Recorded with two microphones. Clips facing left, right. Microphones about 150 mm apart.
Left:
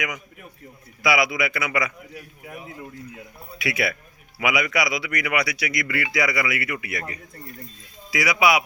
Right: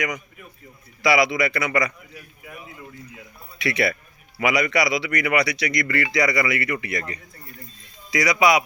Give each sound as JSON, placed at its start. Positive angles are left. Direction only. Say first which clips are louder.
{"t": 1.0, "sound": "speech", "louder": "right 3 dB", "side_deg": 0}
{"t": 2.5, "sound": "a sound", "louder": "left 3 dB", "side_deg": 30}
{"t": 3.6, "sound": "speech", "louder": "right 3 dB", "side_deg": 5}